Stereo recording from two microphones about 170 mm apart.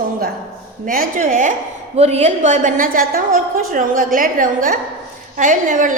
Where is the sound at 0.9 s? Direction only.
50° right (ahead or behind).